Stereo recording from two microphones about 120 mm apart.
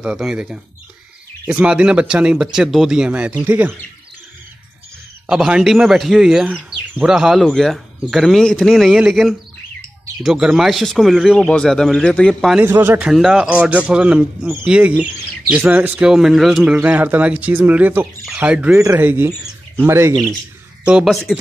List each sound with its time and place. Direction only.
0.0 s speech: 5° right (ahead or behind)
5.2 s speech: 5° right (ahead or behind)
12.6 s a man's voice: 20° right (ahead or behind)
13.0 s speech: 5° right (ahead or behind)
18.8 s a man's voice: 20° right (ahead or behind)
20.8 s speech: 5° right (ahead or behind)